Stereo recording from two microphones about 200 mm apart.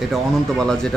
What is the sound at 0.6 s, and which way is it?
Speech, 5° left (ahead or behind).